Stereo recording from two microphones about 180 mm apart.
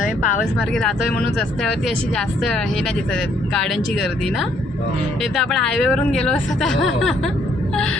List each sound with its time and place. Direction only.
0.0 s speech: 45° left (ahead or behind)
0.7 s speech: centre (ahead or behind)
2.1 s speech: 5° left (ahead or behind)